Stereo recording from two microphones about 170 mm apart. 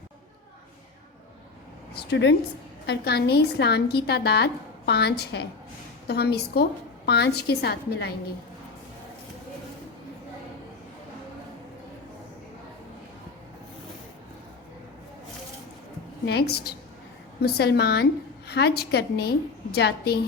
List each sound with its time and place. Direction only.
1.9 s a woman's voice: 75° left (ahead or behind)
2.8 s a woman's voice: 70° left (ahead or behind)
16.2 s a woman's voice: 75° left (ahead or behind)